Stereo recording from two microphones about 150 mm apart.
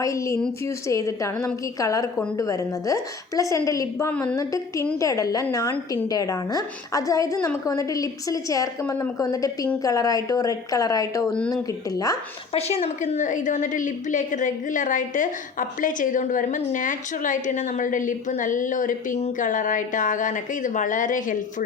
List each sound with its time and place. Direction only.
0.0 s a woman's voice: 20° left (ahead or behind)
4.4 s a woman's voice: 20° left (ahead or behind)
8.8 s a woman's voice: 10° left (ahead or behind)
9.1 s a woman's voice: 25° left (ahead or behind)
11.3 s a woman's voice: 5° left (ahead or behind)
11.9 s a woman's voice: 25° left (ahead or behind)
12.5 s a woman's voice: 45° left (ahead or behind); by 21.3 s 60° left (ahead or behind)